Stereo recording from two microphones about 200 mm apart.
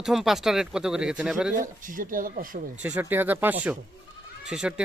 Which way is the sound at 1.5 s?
40° right (ahead or behind).